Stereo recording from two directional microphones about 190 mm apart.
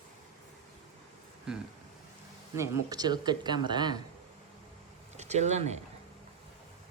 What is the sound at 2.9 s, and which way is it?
Speech, 20° right (ahead or behind).